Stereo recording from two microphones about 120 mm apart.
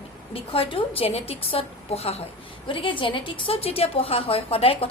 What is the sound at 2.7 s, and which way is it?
A woman's voice, 45° left (ahead or behind).